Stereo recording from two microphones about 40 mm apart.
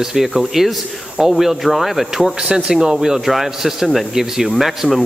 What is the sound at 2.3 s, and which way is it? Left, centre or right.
Speech, right.